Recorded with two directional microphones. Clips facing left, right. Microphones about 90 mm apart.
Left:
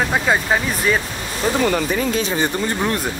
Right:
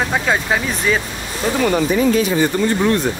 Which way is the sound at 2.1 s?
25° left (ahead or behind).